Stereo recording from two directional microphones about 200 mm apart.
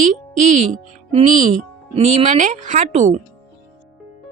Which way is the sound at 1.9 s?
35° right (ahead or behind).